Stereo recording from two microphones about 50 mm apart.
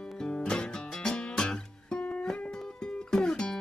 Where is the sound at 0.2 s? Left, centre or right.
Centre.